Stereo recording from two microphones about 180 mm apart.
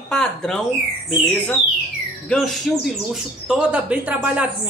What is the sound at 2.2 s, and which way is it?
A woman's voice, centre (ahead or behind).